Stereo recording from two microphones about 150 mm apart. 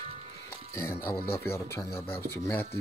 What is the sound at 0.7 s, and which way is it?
Speech, 20° left (ahead or behind).